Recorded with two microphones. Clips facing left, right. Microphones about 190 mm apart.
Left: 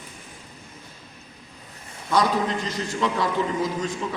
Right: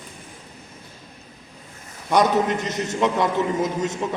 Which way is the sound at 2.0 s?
20° right (ahead or behind).